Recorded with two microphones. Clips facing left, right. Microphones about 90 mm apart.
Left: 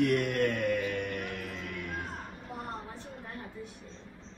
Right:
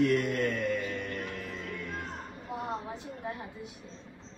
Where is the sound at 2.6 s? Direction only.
15° right (ahead or behind).